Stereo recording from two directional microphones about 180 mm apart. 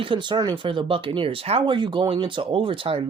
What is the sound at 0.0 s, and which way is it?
Speech, 25° right (ahead or behind).